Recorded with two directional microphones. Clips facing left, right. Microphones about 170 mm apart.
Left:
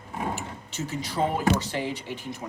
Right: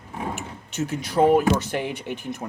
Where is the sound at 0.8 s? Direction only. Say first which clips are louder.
Right 8 dB; 70° right (ahead or behind).